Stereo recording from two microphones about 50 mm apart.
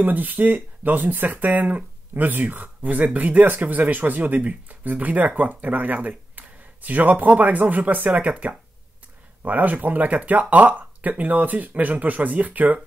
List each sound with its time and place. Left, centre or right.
0.0 s speech: right